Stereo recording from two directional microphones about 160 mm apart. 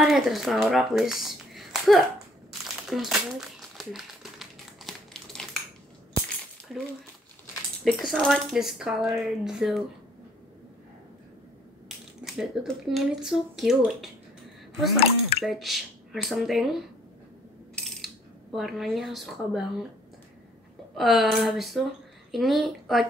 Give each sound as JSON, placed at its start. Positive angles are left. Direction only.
{"t": 0.0, "sound": "speech", "side_deg": 0}
{"t": 2.9, "sound": "crumpling", "side_deg": 0}
{"t": 6.7, "sound": "speech", "side_deg": 0}
{"t": 12.4, "sound": "speech", "side_deg": 0}
{"t": 15.0, "sound": "speech", "side_deg": 40}
{"t": 15.4, "sound": "speech", "side_deg": 0}
{"t": 17.7, "sound": "cutlery", "side_deg": 0}
{"t": 20.9, "sound": "speech", "side_deg": 0}